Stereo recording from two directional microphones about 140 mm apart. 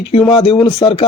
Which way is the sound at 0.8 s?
40° left (ahead or behind).